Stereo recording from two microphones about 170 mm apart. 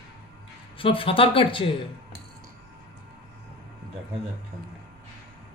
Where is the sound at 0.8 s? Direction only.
30° left (ahead or behind).